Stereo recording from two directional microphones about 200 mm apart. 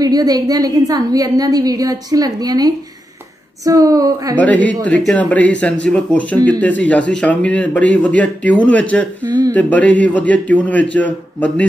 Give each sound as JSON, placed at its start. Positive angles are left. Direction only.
{"t": 0.0, "sound": "a woman's voice", "side_deg": -20}
{"t": 4.4, "sound": "a man's voice", "side_deg": 5}
{"t": 9.2, "sound": "speech", "side_deg": -20}
{"t": 9.5, "sound": "a man's voice", "side_deg": 10}